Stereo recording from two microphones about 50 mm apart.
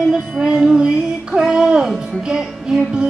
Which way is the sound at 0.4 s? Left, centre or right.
Centre.